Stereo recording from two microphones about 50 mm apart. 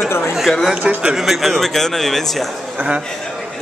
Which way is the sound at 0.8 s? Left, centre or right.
Centre.